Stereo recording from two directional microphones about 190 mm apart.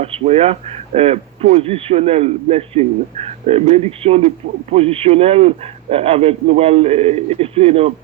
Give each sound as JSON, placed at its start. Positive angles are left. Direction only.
{"t": 0.0, "sound": "speech", "side_deg": -30}